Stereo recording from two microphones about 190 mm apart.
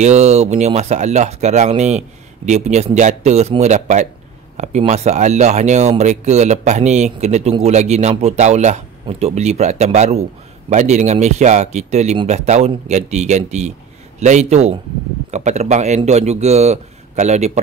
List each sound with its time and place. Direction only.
0.0 s speech: 35° right (ahead or behind)